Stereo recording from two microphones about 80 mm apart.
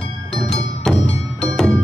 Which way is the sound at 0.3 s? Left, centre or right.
Centre.